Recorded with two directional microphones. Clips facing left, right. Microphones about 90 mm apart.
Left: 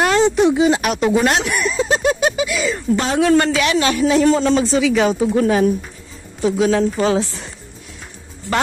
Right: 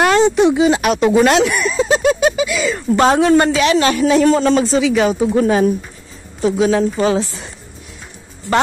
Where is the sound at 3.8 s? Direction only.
45° right (ahead or behind).